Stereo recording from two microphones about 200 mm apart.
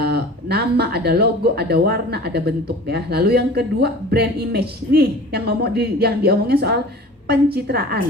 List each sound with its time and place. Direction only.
0.0 s speech: 55° right (ahead or behind)